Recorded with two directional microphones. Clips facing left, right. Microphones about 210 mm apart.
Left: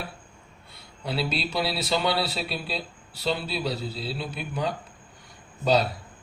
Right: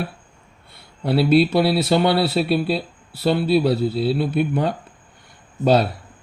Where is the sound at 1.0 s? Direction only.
60° right (ahead or behind).